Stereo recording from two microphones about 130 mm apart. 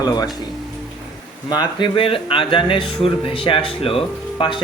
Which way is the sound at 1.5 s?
35° left (ahead or behind).